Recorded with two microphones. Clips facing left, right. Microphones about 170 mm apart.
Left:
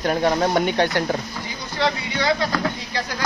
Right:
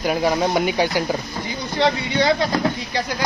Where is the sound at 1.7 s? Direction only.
25° right (ahead or behind).